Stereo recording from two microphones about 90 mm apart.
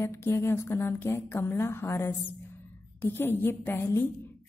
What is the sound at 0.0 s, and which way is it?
A woman's voice, 30° left (ahead or behind).